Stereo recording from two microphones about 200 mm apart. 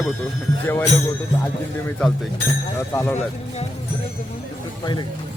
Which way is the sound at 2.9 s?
15° left (ahead or behind).